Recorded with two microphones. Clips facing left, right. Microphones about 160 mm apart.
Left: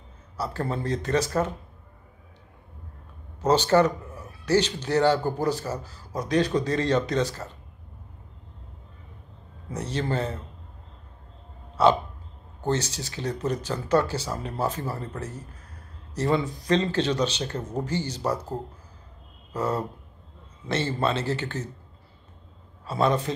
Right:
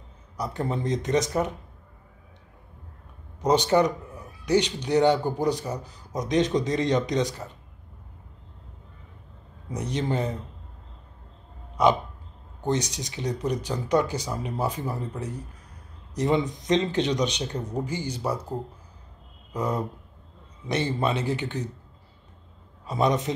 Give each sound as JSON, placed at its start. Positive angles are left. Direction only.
{"t": 0.4, "sound": "speech", "side_deg": -15}
{"t": 3.3, "sound": "speech", "side_deg": -15}
{"t": 9.7, "sound": "speech", "side_deg": -15}
{"t": 11.7, "sound": "a sound", "side_deg": -15}
{"t": 12.6, "sound": "speech", "side_deg": -15}
{"t": 19.5, "sound": "speech", "side_deg": -15}
{"t": 22.8, "sound": "speech", "side_deg": -15}